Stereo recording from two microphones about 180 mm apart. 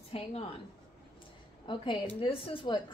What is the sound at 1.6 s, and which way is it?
A woman's voice, 30° left (ahead or behind).